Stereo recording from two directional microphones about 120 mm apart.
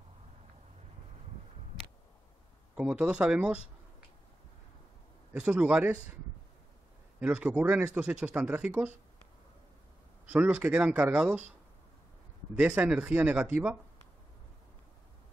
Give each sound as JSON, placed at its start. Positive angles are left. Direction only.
{"t": 2.7, "sound": "speech", "side_deg": -10}
{"t": 5.3, "sound": "speech", "side_deg": -10}
{"t": 7.2, "sound": "speech", "side_deg": -10}
{"t": 10.2, "sound": "speech", "side_deg": -10}
{"t": 12.5, "sound": "speech", "side_deg": -10}